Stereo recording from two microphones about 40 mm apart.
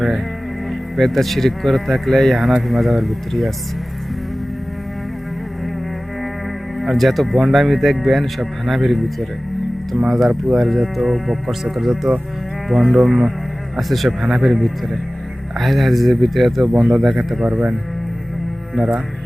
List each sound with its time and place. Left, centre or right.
0.7 s speech: centre
6.7 s speech: centre
13.7 s speech: centre
17.5 s speech: right